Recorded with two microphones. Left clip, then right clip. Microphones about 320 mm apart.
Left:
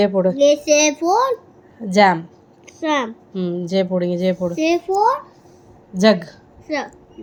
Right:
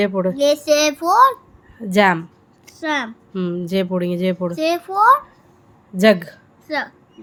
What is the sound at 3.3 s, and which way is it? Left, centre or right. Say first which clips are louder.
Speech: left 1 dB; centre.